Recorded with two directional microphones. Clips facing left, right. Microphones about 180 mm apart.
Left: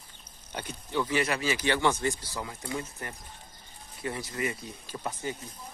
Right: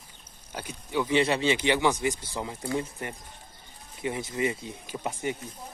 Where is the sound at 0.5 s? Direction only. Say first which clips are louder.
Right 1 dB; 5° right (ahead or behind).